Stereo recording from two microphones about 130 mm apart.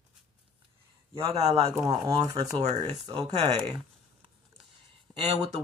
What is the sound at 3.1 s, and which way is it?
Speech, 50° right (ahead or behind).